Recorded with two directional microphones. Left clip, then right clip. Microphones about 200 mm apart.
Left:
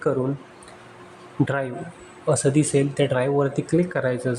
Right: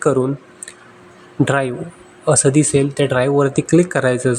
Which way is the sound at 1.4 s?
20° right (ahead or behind).